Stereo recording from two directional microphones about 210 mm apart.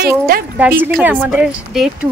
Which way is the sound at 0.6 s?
10° right (ahead or behind).